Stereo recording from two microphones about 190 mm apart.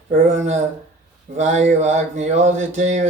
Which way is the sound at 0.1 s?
35° right (ahead or behind).